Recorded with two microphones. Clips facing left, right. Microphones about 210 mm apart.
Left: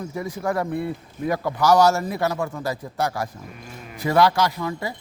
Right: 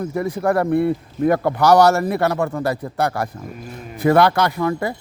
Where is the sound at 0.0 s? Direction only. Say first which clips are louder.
Right 6 dB; 60° right (ahead or behind).